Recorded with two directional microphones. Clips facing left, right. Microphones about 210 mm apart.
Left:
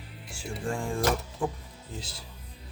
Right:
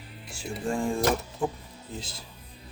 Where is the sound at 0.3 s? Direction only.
20° right (ahead or behind).